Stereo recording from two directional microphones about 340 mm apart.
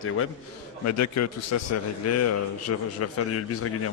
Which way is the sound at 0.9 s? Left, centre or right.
Left.